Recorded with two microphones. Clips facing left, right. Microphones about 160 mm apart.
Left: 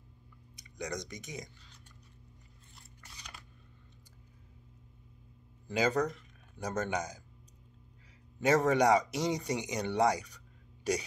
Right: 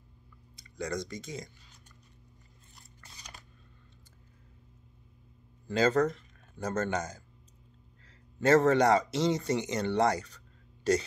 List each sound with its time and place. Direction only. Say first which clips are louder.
0.6 s speech: right 4 dB; 15° left (ahead or behind)
5.7 s speech: right 4 dB; 15° left (ahead or behind)
8.4 s speech: right 4 dB; 15° left (ahead or behind)